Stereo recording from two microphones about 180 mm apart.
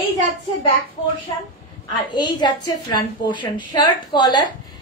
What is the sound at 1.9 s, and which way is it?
Female singing, 25° left (ahead or behind).